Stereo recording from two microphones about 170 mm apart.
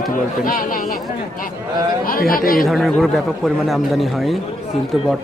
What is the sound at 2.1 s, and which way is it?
Speech, 55° left (ahead or behind).